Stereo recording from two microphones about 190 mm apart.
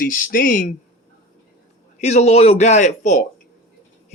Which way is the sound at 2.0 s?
35° left (ahead or behind).